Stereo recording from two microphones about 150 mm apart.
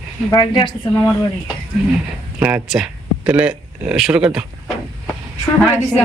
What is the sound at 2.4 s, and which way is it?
Speech, 5° right (ahead or behind).